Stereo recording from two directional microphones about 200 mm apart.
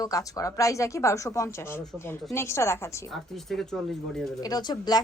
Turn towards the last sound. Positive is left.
turn(degrees=20)  # may be behind; listen again after turning